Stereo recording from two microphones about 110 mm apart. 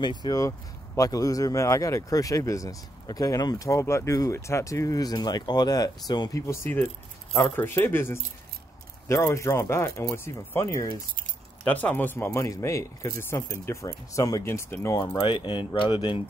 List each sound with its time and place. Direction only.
0.0 s speech: 40° left (ahead or behind)
6.4 s speech: 25° left (ahead or behind)
11.6 s speech: 15° left (ahead or behind)
12.4 s speech: 25° left (ahead or behind)
15.0 s speech: 50° left (ahead or behind)